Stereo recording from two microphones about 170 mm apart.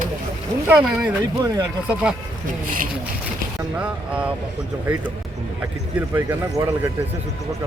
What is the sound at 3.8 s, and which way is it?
Speech, 5° right (ahead or behind).